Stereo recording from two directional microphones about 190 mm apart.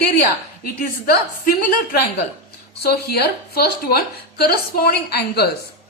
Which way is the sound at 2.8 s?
55° left (ahead or behind).